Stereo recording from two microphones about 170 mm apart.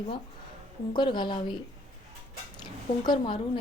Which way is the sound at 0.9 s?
25° left (ahead or behind).